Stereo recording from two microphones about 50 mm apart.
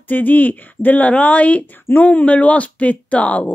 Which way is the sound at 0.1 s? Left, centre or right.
Left.